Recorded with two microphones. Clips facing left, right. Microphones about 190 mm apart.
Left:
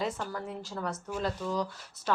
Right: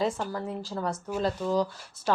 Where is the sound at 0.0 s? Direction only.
30° right (ahead or behind).